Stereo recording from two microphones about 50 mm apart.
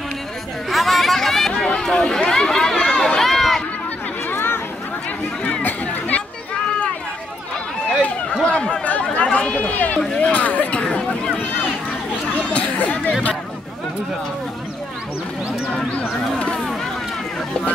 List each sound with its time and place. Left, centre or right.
0.7 s chatter: centre
1.8 s run: centre
4.3 s a sound: left
5.6 s chatter: left
8.5 s a sound: centre
8.8 s run: left
10.2 s speech: left
10.8 s chatter: centre
12.5 s chatter: left
15.7 s speech: left